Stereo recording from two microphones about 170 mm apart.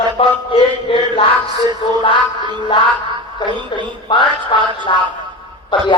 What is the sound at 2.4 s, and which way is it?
Music, 25° right (ahead or behind).